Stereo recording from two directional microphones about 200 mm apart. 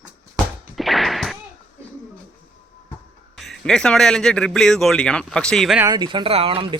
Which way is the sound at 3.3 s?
Centre (ahead or behind).